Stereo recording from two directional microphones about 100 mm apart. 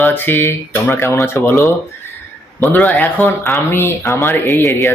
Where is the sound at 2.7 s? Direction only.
15° left (ahead or behind).